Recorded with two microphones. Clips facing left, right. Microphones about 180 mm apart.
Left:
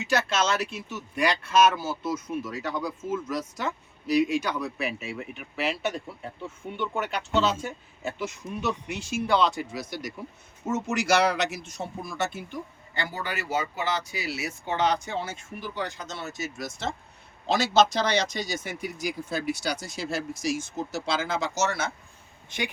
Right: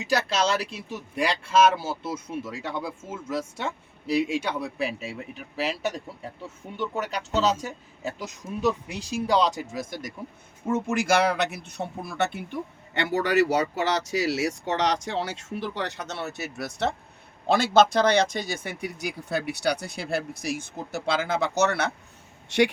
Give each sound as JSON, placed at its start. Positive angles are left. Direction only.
{"t": 0.0, "sound": "a man's voice", "side_deg": -35}
{"t": 22.4, "sound": "speech", "side_deg": -75}